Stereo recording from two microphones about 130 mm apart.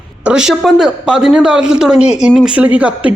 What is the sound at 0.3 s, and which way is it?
A man's voice, 5° right (ahead or behind).